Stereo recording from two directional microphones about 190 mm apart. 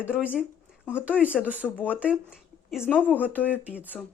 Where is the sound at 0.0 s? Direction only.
5° right (ahead or behind).